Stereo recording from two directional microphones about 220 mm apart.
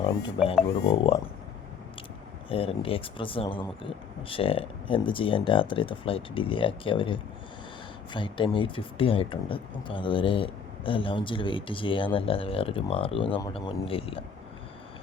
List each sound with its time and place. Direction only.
0.9 s speech: 25° left (ahead or behind)
2.5 s speech: 25° left (ahead or behind)